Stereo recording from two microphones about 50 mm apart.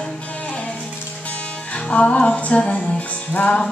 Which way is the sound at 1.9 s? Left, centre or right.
Left.